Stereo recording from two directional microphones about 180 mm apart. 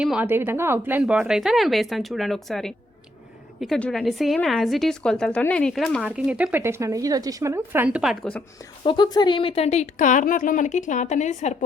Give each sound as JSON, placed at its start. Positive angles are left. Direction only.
{"t": 0.0, "sound": "speech", "side_deg": -5}
{"t": 8.8, "sound": "a woman's voice", "side_deg": 25}